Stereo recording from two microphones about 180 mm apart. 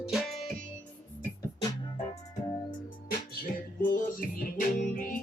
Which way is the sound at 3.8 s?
50° left (ahead or behind).